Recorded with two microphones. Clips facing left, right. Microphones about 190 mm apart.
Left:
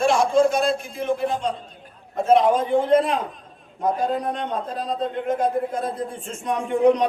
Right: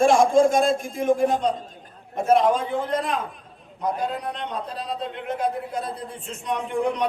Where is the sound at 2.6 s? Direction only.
25° left (ahead or behind).